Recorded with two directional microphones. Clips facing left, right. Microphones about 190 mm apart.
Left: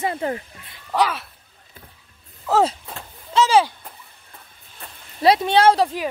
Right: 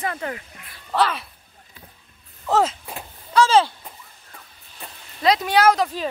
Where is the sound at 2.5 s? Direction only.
5° left (ahead or behind).